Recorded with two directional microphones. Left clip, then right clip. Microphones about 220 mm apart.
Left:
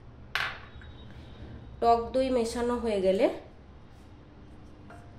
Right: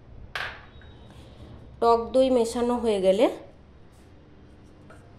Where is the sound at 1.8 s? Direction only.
25° right (ahead or behind).